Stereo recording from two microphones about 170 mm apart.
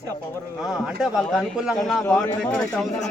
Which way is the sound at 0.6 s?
Centre (ahead or behind).